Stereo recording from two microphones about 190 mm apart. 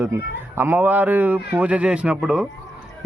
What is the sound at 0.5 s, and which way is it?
A man's voice, 10° right (ahead or behind).